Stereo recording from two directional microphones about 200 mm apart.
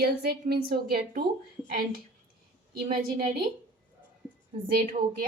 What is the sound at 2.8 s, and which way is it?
Speech, 45° right (ahead or behind).